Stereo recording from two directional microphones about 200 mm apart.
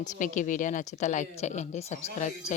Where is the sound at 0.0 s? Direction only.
40° left (ahead or behind).